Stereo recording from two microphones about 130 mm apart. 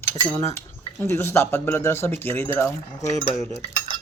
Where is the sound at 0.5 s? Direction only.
20° left (ahead or behind).